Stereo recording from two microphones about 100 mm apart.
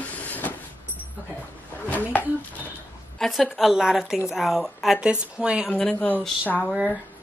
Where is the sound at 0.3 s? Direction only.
15° left (ahead or behind).